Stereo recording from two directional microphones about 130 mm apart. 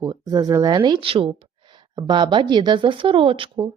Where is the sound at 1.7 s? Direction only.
35° right (ahead or behind).